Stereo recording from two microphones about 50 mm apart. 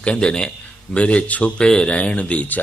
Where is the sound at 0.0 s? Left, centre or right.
Left.